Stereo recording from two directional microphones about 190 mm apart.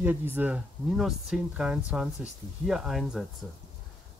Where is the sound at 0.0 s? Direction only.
10° right (ahead or behind).